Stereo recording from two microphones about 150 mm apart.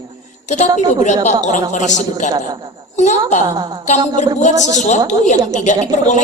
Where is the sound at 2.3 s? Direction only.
30° right (ahead or behind).